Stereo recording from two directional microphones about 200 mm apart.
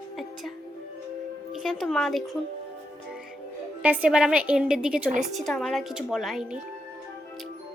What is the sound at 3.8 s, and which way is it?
A woman's voice, 10° right (ahead or behind).